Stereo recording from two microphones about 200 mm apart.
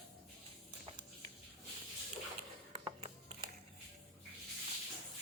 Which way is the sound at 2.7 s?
30° right (ahead or behind).